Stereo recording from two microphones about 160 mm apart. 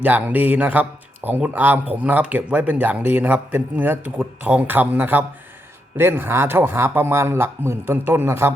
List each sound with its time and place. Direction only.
0.0 s speech: 10° right (ahead or behind)